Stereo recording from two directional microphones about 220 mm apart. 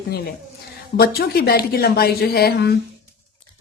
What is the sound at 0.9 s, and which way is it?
A woman's voice, 45° left (ahead or behind).